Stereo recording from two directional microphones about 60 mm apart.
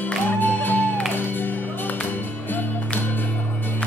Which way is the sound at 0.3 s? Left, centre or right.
Left.